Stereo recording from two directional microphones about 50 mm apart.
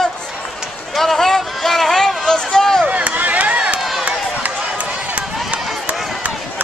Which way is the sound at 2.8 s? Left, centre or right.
Right.